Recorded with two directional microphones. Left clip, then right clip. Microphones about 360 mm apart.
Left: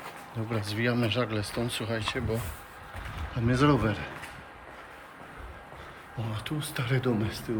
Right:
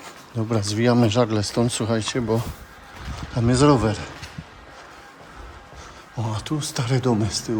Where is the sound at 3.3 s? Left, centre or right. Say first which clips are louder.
Right 8 dB; centre.